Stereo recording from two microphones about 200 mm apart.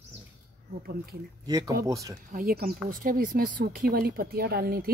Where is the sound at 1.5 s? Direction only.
20° right (ahead or behind).